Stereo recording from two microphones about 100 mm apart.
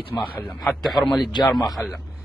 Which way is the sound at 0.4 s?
15° left (ahead or behind).